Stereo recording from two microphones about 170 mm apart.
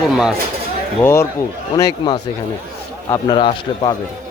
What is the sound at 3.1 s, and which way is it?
Speech, 25° left (ahead or behind).